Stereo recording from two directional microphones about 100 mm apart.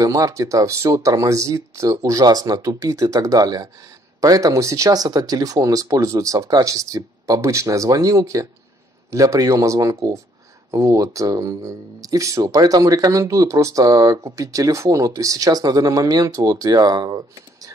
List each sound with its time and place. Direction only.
0.0 s speech: 35° right (ahead or behind)